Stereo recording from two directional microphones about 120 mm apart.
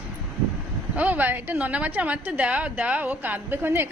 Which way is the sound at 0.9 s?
15° right (ahead or behind).